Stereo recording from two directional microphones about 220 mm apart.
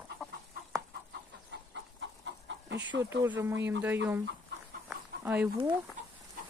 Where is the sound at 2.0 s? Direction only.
55° right (ahead or behind).